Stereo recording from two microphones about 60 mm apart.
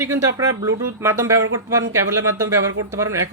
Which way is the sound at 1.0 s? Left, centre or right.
Right.